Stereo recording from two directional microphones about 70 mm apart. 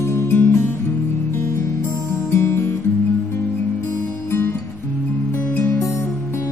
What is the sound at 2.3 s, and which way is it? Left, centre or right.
Music, left.